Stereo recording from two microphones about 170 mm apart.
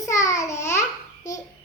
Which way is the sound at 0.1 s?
20° left (ahead or behind).